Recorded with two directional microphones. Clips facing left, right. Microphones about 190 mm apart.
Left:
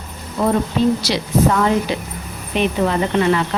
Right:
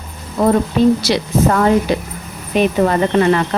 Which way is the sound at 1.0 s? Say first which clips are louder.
Right 2 dB; 50° right (ahead or behind).